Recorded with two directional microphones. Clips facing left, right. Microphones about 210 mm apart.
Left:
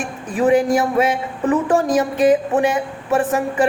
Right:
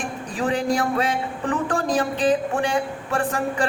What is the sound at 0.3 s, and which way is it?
Speech, 20° left (ahead or behind).